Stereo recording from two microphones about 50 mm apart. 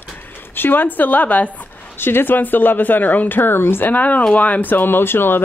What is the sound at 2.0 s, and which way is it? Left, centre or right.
Speech, left.